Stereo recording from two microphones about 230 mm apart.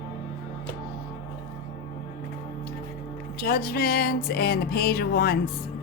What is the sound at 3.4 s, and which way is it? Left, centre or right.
Music, left.